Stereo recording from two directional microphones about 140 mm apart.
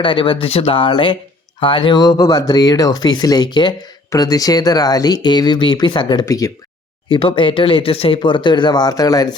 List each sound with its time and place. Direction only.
0.0 s speech: 35° left (ahead or behind)
7.1 s speech: 35° left (ahead or behind)